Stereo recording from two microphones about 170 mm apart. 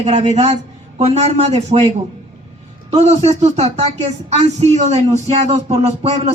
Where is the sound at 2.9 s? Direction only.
40° right (ahead or behind).